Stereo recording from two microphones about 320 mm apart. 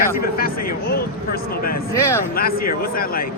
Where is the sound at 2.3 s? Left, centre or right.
Left.